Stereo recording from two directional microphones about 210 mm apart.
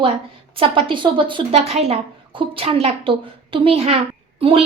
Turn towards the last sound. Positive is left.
turn(degrees=-25)  # may be behind; listen again after turning